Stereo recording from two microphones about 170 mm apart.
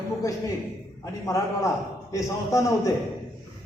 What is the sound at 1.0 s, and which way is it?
A man's voice, 20° left (ahead or behind).